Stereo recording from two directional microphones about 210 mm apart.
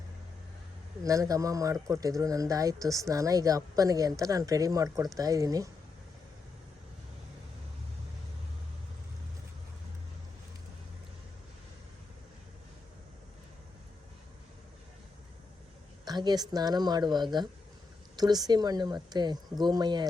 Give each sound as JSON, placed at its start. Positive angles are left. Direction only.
{"t": 1.0, "sound": "speech", "side_deg": -15}
{"t": 16.0, "sound": "speech", "side_deg": -20}